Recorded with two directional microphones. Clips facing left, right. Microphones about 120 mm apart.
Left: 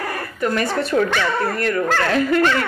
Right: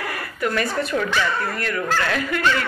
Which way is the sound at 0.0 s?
35° left (ahead or behind).